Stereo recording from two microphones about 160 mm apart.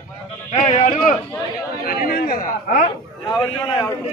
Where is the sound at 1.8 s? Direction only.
65° left (ahead or behind).